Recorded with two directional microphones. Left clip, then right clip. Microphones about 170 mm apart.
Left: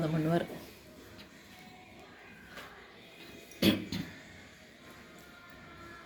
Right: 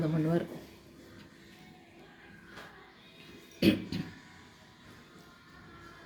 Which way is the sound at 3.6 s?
30° right (ahead or behind).